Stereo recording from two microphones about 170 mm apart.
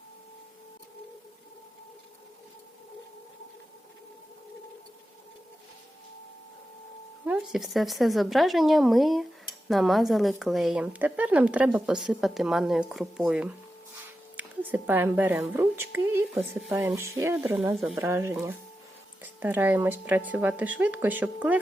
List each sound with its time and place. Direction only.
7.3 s a woman's voice: centre (ahead or behind)